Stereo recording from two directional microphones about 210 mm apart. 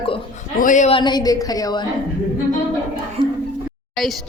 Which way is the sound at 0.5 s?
35° left (ahead or behind).